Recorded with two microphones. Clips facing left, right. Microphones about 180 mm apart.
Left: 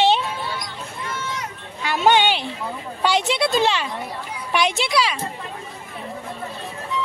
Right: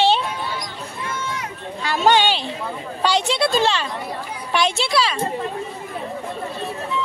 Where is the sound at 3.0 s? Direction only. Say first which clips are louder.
Right 1 dB; 20° left (ahead or behind).